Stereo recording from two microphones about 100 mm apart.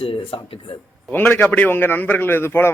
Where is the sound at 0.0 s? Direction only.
70° left (ahead or behind).